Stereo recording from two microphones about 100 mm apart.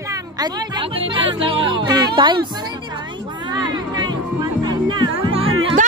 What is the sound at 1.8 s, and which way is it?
Speech, 45° right (ahead or behind).